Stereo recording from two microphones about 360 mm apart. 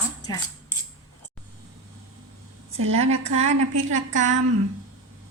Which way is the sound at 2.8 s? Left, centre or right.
Centre.